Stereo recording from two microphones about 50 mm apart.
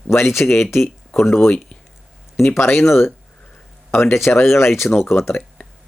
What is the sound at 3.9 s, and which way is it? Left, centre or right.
Speech, left.